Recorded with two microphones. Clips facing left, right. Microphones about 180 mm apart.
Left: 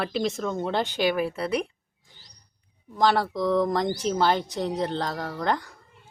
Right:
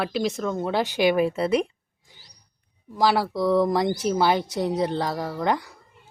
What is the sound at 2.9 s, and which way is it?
Speech, 5° right (ahead or behind).